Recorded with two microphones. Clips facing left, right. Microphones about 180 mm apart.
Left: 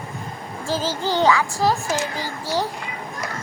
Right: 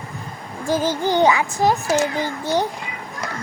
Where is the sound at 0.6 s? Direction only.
15° right (ahead or behind).